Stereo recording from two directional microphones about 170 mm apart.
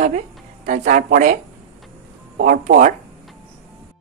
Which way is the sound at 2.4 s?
60° right (ahead or behind).